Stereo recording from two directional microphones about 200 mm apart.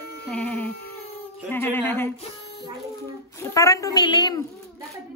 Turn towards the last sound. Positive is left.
turn(degrees=20)  # may be behind; listen again after turning